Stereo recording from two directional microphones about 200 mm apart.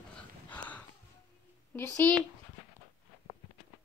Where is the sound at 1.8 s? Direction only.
10° left (ahead or behind).